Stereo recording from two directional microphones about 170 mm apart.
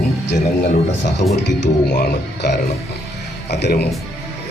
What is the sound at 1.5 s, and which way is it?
A man's voice, 85° left.